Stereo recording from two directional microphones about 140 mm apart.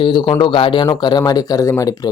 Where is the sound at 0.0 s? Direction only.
35° left (ahead or behind).